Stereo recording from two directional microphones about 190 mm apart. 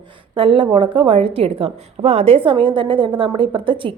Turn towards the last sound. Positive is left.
turn(degrees=-25)  # may be behind; listen again after turning